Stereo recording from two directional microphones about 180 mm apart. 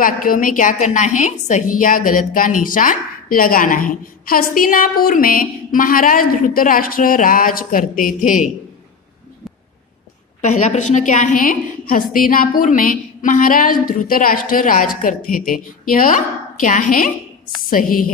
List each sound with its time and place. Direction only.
0.0 s a woman's voice: 50° left (ahead or behind)
10.4 s a woman's voice: 40° left (ahead or behind)